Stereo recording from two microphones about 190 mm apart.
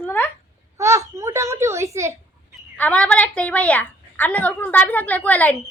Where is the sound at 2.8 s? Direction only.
5° left (ahead or behind).